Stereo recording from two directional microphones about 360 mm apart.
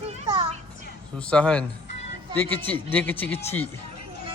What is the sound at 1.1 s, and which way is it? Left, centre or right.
A man's voice, centre.